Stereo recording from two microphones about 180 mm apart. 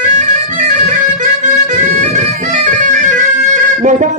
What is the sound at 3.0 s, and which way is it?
Bagpipes, 40° right (ahead or behind).